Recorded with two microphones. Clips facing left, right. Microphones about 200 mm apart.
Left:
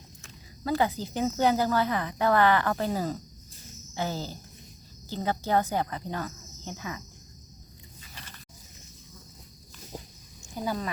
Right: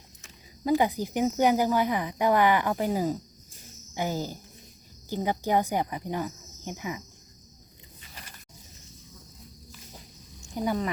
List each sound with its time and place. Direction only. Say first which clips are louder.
0.2 s speech: right 3 dB; 15° right (ahead or behind)
10.6 s speech: right 3 dB; 20° right (ahead or behind)